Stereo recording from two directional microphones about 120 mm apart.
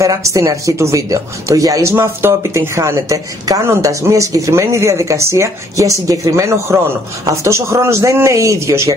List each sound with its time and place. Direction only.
0.0 s speech: 25° right (ahead or behind)